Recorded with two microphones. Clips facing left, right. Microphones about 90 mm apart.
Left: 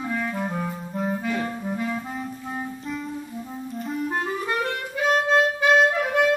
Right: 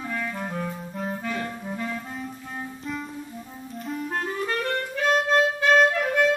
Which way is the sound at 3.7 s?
5° left (ahead or behind).